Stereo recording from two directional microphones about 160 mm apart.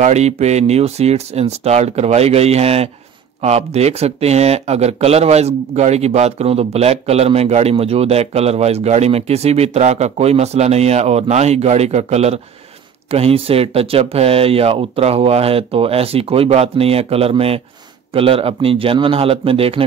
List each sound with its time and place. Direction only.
0.0 s speech: 45° right (ahead or behind)